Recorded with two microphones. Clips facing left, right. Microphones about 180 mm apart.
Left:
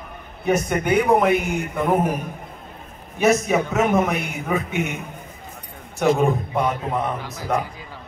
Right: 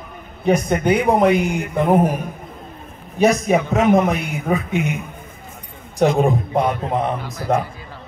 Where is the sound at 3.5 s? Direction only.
35° right (ahead or behind).